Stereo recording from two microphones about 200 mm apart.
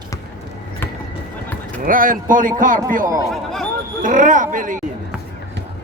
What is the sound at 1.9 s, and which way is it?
Speech, 45° right (ahead or behind).